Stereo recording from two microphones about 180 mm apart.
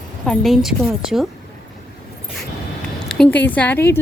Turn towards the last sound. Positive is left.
turn(degrees=10)  # may be behind; listen again after turning